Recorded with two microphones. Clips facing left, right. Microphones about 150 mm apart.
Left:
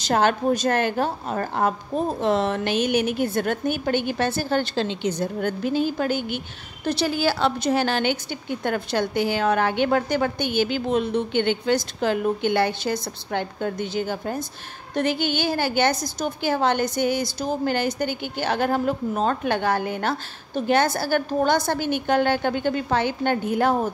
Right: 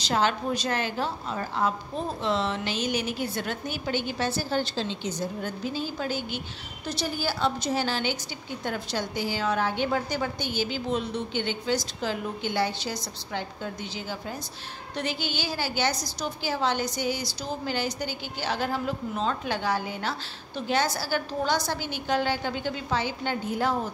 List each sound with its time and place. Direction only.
0.0 s a woman's voice: 55° left (ahead or behind)
6.9 s a woman's voice: 80° left; by 23.9 s 55° left (ahead or behind)